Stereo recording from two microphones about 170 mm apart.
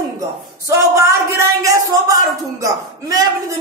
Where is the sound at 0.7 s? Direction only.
15° right (ahead or behind).